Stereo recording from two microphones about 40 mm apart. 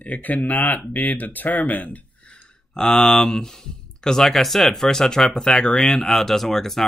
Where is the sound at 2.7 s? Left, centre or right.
Centre.